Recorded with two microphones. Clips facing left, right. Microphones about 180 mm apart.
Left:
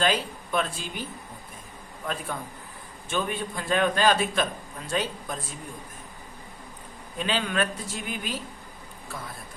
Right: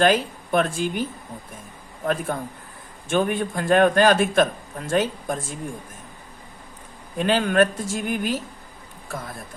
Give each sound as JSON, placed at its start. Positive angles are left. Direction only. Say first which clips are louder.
{"t": 0.0, "sound": "a man's voice", "louder": "right 7 dB", "side_deg": -50}
{"t": 2.0, "sound": "a man's voice", "louder": "right 8 dB", "side_deg": -50}
{"t": 7.2, "sound": "a man's voice", "louder": "right 8 dB", "side_deg": -45}